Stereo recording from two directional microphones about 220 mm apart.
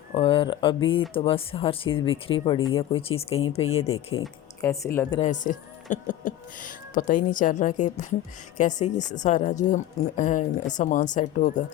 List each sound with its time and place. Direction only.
0.1 s speech: 25° left (ahead or behind)
3.9 s speech: 70° left (ahead or behind)
4.6 s speech: 15° left (ahead or behind)
5.2 s a woman's voice: 35° left (ahead or behind)